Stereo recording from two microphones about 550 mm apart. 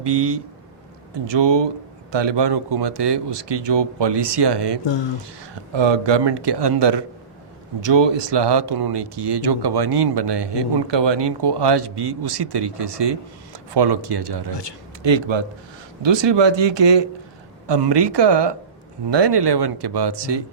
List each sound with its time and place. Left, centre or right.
0.0 s speech: right